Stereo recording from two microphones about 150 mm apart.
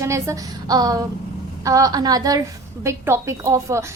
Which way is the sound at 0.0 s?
20° right (ahead or behind).